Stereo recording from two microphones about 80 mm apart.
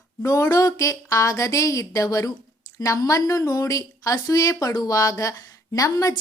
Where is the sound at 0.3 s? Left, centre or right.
Left.